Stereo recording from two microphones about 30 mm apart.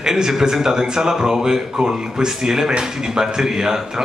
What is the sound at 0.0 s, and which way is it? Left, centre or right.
A man's voice, centre.